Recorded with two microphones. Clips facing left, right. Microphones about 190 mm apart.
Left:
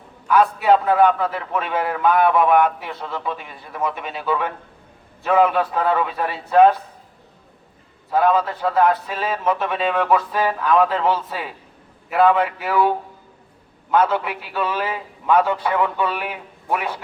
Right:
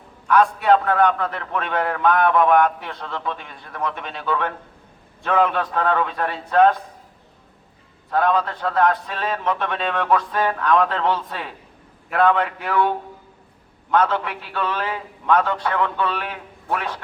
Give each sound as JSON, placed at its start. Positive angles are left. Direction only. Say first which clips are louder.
{"t": 0.3, "sound": "a man's voice", "louder": "left 1 dB", "side_deg": 5}
{"t": 8.1, "sound": "a man's voice", "louder": "left 2 dB", "side_deg": 5}
{"t": 13.9, "sound": "a man's voice", "louder": "left 1 dB", "side_deg": 10}